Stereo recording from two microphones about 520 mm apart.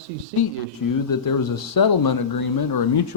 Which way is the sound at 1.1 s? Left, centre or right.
Left.